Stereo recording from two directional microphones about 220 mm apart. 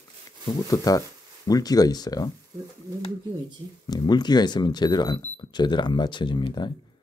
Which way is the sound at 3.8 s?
20° left (ahead or behind).